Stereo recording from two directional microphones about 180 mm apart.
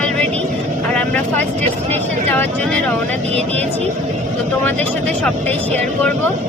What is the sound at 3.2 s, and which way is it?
Speech, 35° right (ahead or behind).